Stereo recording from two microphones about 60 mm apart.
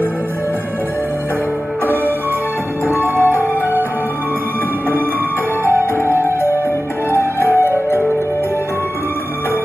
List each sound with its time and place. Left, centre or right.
3.2 s music: right
7.1 s music: left